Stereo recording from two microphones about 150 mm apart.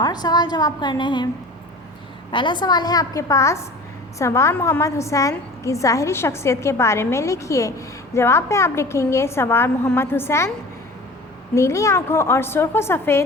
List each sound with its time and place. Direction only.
0.0 s a woman's voice: 25° left (ahead or behind)
2.3 s a woman's voice: 30° left (ahead or behind)
11.5 s a woman's voice: 20° left (ahead or behind)